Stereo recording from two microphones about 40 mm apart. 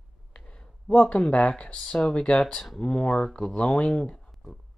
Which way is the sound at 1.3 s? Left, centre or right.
Left.